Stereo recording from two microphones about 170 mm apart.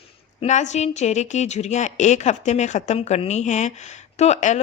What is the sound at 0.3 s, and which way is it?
A woman's voice, 45° left (ahead or behind).